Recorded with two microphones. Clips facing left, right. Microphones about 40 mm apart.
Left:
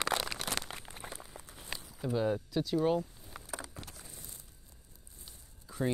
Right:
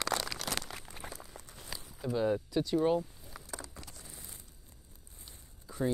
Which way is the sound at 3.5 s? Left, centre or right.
Left.